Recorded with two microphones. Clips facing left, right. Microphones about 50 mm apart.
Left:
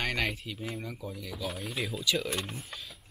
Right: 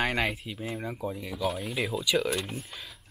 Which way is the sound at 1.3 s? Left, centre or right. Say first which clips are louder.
Right 5 dB; centre.